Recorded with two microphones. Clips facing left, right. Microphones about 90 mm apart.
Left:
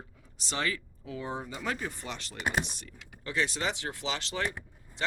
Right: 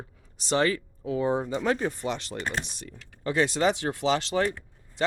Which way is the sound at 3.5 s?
45° right (ahead or behind).